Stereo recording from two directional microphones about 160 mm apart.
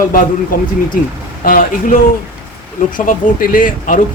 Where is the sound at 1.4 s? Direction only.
60° left (ahead or behind).